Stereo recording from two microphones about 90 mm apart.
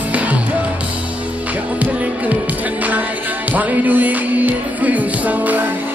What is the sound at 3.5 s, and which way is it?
Music, 20° right (ahead or behind).